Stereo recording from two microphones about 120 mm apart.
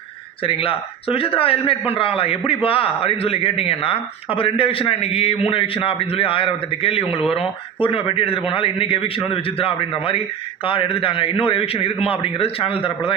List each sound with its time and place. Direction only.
0.4 s a man's voice: 50° left (ahead or behind)